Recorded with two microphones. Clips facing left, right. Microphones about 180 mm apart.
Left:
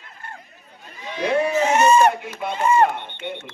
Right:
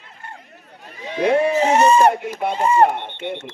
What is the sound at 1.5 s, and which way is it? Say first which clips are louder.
Speech: right 2 dB; 35° right (ahead or behind).